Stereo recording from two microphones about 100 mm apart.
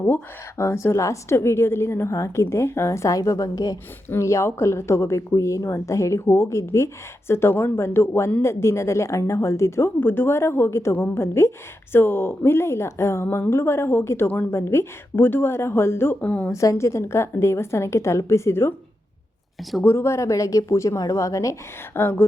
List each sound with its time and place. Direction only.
0.0 s speech: 25° left (ahead or behind)
16.5 s speech: 30° left (ahead or behind)
19.8 s speech: 25° left (ahead or behind)
21.9 s speech: 20° left (ahead or behind)